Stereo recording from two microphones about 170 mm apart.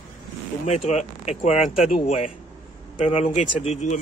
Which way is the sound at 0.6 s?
40° left (ahead or behind).